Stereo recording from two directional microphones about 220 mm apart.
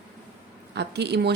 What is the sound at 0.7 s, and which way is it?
Speech, 50° right (ahead or behind).